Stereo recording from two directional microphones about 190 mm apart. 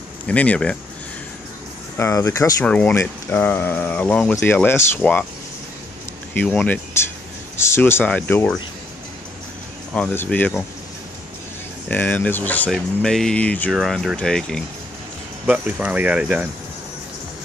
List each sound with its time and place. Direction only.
0.3 s speech: 5° left (ahead or behind)
2.0 s speech: 15° left (ahead or behind)
6.3 s speech: 10° left (ahead or behind)
9.9 s speech: 10° left (ahead or behind)
11.9 s speech: 10° left (ahead or behind)